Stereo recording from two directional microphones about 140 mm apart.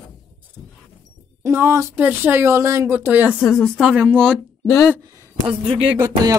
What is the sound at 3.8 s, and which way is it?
Speech, 10° right (ahead or behind).